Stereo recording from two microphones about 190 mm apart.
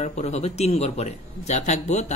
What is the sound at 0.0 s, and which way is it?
A man's voice, 35° left (ahead or behind).